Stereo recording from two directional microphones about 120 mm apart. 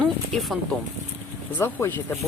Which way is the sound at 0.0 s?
Centre (ahead or behind).